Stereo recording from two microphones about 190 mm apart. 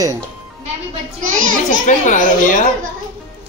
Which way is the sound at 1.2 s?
45° right (ahead or behind).